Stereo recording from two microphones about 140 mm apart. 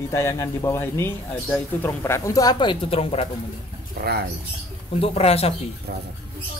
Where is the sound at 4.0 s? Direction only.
90° right.